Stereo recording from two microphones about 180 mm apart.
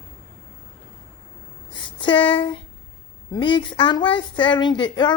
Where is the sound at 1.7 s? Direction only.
25° left (ahead or behind).